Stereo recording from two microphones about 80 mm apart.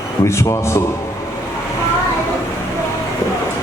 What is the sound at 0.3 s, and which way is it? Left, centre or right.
Speech, left.